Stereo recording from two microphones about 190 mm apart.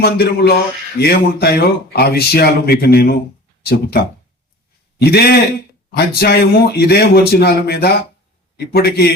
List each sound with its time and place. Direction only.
0.0 s speech: 55° left (ahead or behind)